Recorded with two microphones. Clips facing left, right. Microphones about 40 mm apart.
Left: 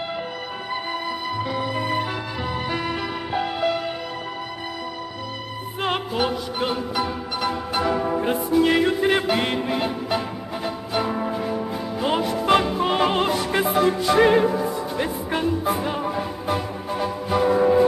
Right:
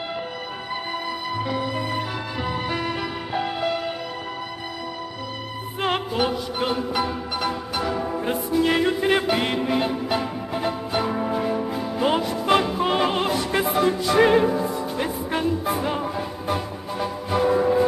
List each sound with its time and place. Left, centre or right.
1.3 s music: centre
5.8 s music: centre
7.7 s music: centre
8.3 s music: centre
12.2 s music: centre